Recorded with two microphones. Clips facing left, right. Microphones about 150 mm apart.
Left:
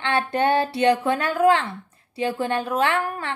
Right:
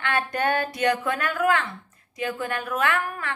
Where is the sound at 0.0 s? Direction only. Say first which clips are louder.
Left 4 dB; 25° left (ahead or behind).